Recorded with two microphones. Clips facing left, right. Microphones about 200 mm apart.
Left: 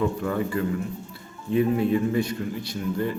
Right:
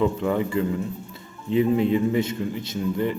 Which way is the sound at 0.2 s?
20° right (ahead or behind).